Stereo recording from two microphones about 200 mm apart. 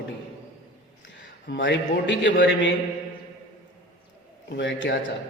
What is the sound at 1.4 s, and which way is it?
A man's voice, 65° left (ahead or behind).